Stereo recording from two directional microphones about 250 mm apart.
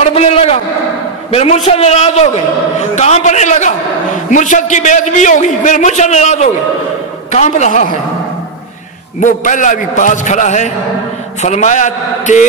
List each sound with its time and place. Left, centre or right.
0.0 s a man's voice: left
9.2 s a man's voice: left